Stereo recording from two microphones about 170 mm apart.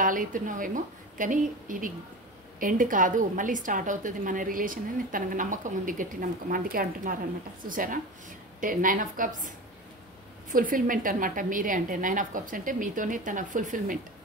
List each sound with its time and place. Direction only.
0.0 s a woman's voice: 50° right (ahead or behind)
10.5 s a woman's voice: 55° right (ahead or behind)